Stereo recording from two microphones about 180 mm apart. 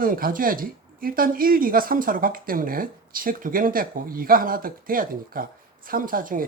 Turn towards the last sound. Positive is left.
turn(degrees=-50)  # may be behind; listen again after turning